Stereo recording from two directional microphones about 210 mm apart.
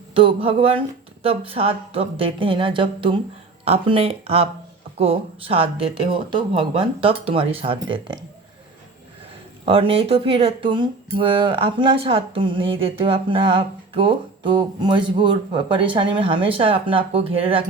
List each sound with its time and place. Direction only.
0.1 s speech: 25° right (ahead or behind)
9.6 s speech: 25° right (ahead or behind)